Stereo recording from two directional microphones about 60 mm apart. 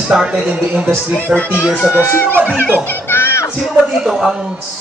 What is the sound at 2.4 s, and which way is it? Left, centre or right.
Speech, left.